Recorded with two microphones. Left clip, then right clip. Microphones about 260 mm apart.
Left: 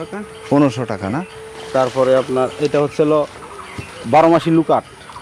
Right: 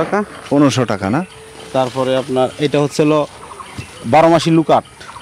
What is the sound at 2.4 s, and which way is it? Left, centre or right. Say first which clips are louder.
Speech: right 1 dB; right.